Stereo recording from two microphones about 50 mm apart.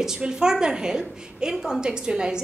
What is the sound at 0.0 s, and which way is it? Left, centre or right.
A woman's voice, centre.